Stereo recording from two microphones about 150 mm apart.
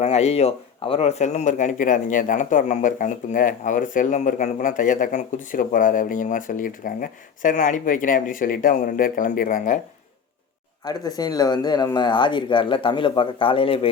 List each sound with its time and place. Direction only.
0.0 s a man's voice: 45° left (ahead or behind)
10.8 s speech: 25° left (ahead or behind)